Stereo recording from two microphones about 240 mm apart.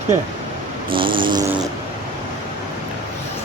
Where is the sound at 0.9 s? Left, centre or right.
Right.